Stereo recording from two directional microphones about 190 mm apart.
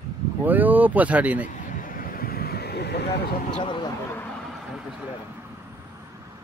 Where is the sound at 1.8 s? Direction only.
45° left (ahead or behind).